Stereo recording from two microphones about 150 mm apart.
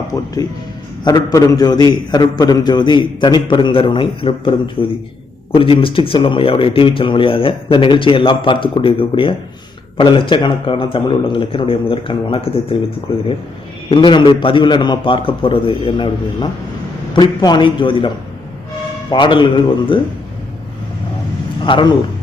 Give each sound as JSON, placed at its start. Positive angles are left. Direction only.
{"t": 1.0, "sound": "a man's voice", "side_deg": 25}
{"t": 13.9, "sound": "a man's voice", "side_deg": 35}
{"t": 19.1, "sound": "a man's voice", "side_deg": 35}
{"t": 21.6, "sound": "a man's voice", "side_deg": 30}